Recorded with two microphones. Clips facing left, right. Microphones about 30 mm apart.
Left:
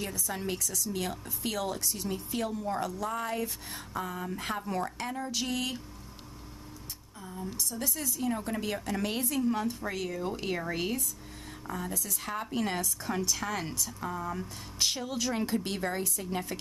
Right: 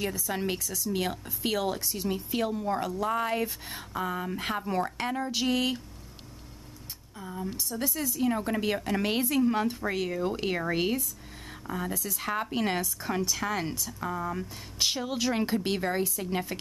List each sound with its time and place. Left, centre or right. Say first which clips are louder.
0.0 s speech: right 4 dB; centre
3.6 s speech: right 3 dB; centre
7.2 s a woman's voice: right 3 dB; right
7.7 s a woman's voice: right 7 dB; centre
8.2 s a woman's voice: right 5 dB; right
12.2 s a woman's voice: right 4 dB; centre